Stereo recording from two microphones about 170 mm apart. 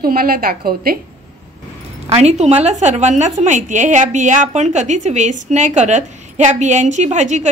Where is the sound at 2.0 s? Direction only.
40° right (ahead or behind).